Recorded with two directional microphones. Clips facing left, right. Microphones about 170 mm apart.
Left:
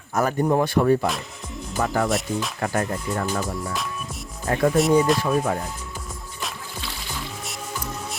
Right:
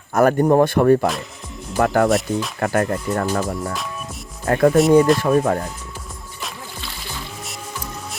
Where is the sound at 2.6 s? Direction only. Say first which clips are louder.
Right 6 dB; 60° right (ahead or behind).